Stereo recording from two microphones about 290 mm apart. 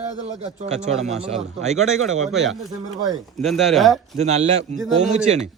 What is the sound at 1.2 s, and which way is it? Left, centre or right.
Speech, centre.